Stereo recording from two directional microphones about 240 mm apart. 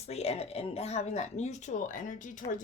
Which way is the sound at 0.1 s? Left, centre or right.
Left.